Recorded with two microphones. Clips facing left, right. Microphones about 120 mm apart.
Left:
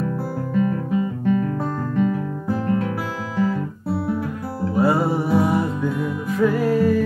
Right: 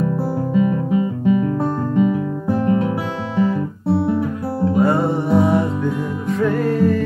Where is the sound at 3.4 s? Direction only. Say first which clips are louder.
Right 4 dB; 25° right (ahead or behind).